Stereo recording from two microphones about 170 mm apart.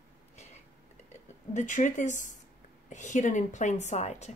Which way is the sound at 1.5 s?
45° left (ahead or behind).